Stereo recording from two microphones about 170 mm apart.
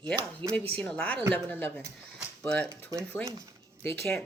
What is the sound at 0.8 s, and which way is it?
Speech, 5° left (ahead or behind).